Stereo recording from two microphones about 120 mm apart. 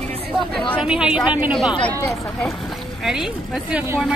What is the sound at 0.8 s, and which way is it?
Speech, 5° right (ahead or behind).